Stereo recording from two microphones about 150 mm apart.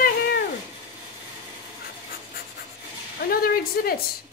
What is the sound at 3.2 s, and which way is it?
Speech, 90° left.